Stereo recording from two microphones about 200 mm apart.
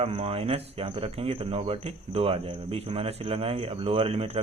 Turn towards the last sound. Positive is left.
turn(degrees=-30)  # may be behind; listen again after turning